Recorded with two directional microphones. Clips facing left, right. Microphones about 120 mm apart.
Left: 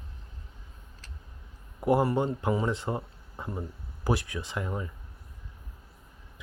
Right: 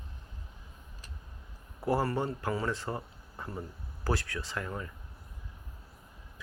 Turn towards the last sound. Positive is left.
turn(degrees=15)  # may be behind; listen again after turning